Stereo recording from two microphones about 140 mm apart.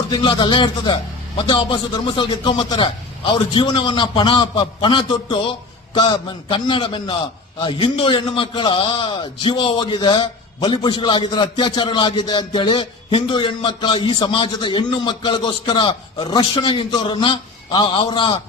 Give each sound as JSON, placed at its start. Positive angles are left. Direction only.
{"t": 0.1, "sound": "a man's voice", "side_deg": 35}